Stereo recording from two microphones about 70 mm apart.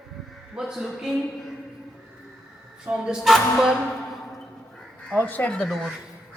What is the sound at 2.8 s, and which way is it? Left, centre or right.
Speech, centre.